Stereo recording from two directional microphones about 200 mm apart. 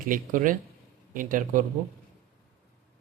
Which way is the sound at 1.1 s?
45° right (ahead or behind).